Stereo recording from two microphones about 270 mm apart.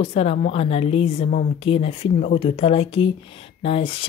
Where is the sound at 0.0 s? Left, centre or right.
Left.